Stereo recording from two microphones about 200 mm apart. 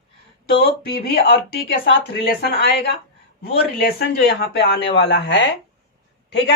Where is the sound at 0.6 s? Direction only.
50° left (ahead or behind).